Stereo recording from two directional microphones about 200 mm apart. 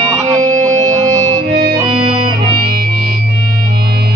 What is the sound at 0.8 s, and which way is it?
Music, 15° right (ahead or behind).